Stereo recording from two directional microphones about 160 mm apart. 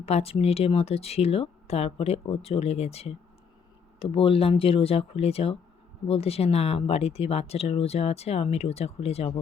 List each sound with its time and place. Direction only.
0.0 s speech: 40° left (ahead or behind)